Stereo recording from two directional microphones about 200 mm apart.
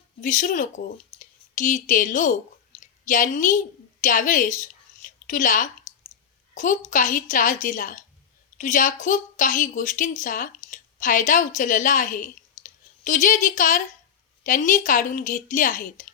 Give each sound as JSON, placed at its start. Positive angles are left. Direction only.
{"t": 0.2, "sound": "a woman's voice", "side_deg": 40}